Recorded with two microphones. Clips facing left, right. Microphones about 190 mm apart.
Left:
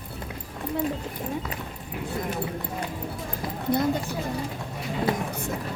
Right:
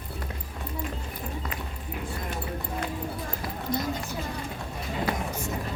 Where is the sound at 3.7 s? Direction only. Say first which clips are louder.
Left 6 dB; 60° left (ahead or behind).